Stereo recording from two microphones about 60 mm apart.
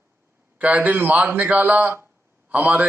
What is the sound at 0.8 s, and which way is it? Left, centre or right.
A man's voice, right.